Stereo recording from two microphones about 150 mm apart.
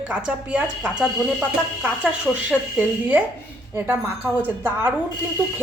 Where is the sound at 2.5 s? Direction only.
10° right (ahead or behind).